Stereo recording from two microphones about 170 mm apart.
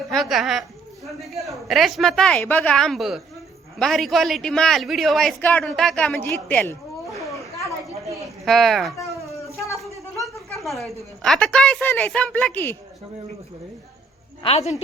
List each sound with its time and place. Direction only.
0.1 s a man's voice: centre (ahead or behind)
8.0 s a woman's voice: 20° right (ahead or behind)
8.4 s a man's voice: centre (ahead or behind)
9.0 s a sound: 15° left (ahead or behind)
9.8 s a woman's voice: centre (ahead or behind)